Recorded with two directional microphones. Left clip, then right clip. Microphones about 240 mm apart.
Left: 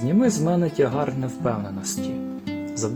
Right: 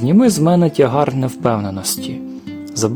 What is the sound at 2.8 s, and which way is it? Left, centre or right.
Speech, right.